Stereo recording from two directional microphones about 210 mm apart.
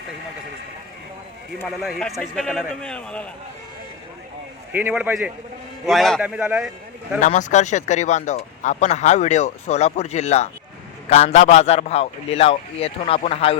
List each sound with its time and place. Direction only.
1.8 s a man's voice: centre (ahead or behind)
4.7 s a man's voice: 10° right (ahead or behind)
7.2 s a man's voice: 35° left (ahead or behind)